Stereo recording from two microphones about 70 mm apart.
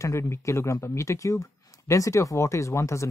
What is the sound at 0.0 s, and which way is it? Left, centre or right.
Speech, left.